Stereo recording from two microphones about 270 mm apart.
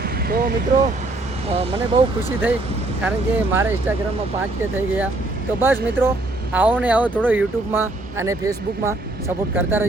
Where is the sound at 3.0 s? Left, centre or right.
Centre.